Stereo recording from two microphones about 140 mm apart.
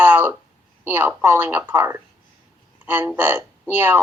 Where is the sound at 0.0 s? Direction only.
15° right (ahead or behind).